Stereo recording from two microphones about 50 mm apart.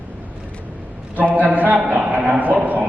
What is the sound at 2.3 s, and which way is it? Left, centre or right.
Speech, right.